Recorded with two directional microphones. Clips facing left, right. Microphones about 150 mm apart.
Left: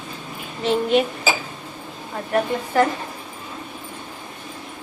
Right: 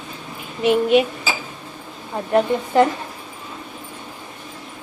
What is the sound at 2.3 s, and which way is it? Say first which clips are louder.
Speech: right 3 dB; 20° right (ahead or behind).